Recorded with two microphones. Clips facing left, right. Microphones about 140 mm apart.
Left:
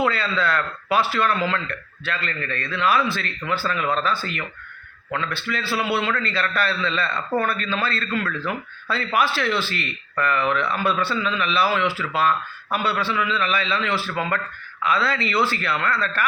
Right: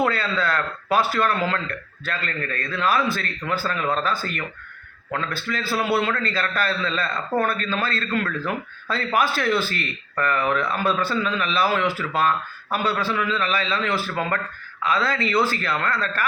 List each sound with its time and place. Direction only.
0.0 s a man's voice: 45° right (ahead or behind)